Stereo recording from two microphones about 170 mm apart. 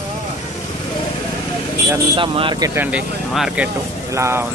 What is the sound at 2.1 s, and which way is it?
Speech, 30° right (ahead or behind).